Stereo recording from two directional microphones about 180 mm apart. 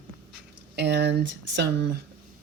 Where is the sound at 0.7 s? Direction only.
70° right (ahead or behind).